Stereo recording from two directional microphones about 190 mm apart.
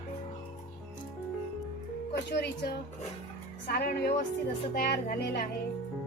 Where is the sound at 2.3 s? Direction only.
60° left (ahead or behind).